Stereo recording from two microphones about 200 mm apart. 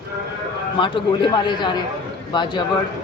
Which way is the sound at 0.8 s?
25° left (ahead or behind).